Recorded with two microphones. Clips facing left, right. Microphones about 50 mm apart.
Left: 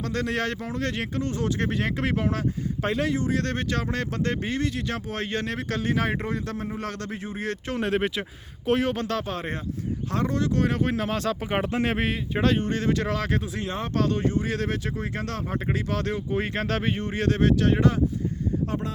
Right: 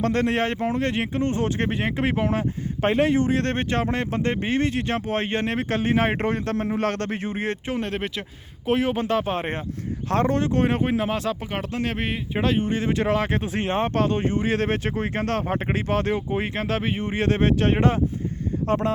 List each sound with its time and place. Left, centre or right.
0.0 s speech: right
2.8 s speech: right
6.1 s a man's voice: right
7.8 s speech: centre
9.2 s speech: right
10.1 s speech: right
10.8 s speech: centre
11.5 s speech: centre
11.9 s speech: centre; by 13.4 s right
13.4 s speech: right
16.4 s speech: centre
17.1 s speech: right